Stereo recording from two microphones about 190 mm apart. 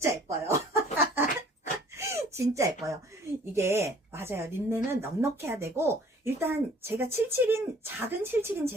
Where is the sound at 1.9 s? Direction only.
15° right (ahead or behind).